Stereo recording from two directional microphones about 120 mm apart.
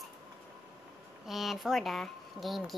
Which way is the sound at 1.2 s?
Centre (ahead or behind).